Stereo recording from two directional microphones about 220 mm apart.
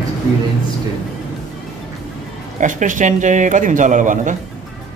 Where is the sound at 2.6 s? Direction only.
35° right (ahead or behind).